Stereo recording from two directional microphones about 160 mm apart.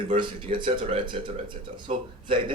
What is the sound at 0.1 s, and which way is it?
Speech, 35° right (ahead or behind).